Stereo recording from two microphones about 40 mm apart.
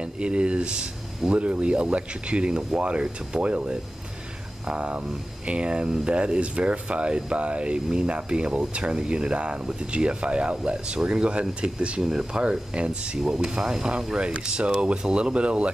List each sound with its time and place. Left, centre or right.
0.0 s speech: right
12.0 s speech: centre